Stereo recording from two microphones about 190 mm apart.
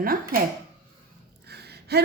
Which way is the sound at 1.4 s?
60° right (ahead or behind).